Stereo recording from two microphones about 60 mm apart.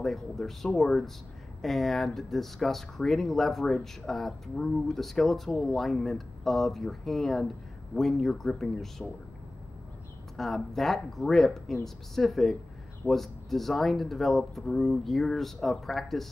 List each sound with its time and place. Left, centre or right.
0.0 s speech: centre
10.3 s speech: centre